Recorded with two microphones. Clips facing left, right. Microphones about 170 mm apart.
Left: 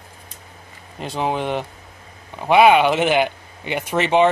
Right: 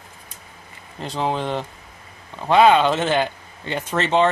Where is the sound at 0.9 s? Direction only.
15° left (ahead or behind).